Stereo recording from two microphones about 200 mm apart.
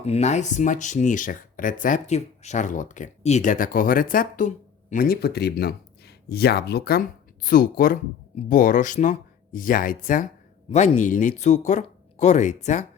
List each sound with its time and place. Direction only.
0.0 s speech: 35° left (ahead or behind)